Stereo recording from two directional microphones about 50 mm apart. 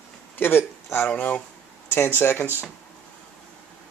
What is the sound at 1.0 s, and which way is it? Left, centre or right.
Speech, left.